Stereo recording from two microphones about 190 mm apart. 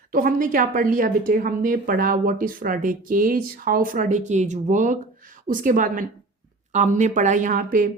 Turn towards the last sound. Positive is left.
turn(degrees=-45)  # may be behind; listen again after turning